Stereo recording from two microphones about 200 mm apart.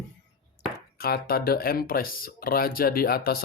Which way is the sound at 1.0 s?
50° left (ahead or behind).